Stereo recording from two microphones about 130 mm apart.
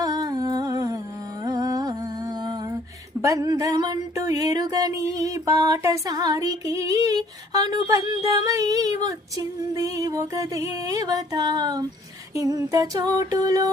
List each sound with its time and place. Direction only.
0.0 s humming: 30° right (ahead or behind)
1.5 s music: 30° right (ahead or behind)
3.2 s a sound: 25° right (ahead or behind)